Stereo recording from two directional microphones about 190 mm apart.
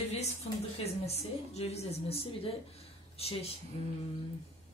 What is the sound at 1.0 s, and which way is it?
Speech, 35° left (ahead or behind).